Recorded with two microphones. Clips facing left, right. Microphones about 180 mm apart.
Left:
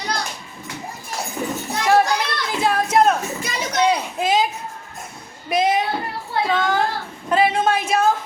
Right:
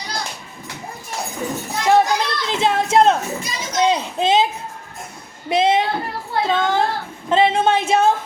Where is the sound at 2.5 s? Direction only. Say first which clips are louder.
Right 2 dB; 25° right (ahead or behind).